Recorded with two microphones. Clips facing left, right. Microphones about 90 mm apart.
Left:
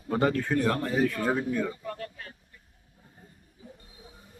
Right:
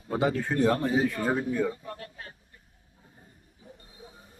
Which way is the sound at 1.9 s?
30° right (ahead or behind).